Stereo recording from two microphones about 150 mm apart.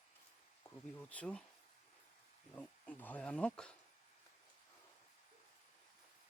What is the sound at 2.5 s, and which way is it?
Speech, 10° left (ahead or behind).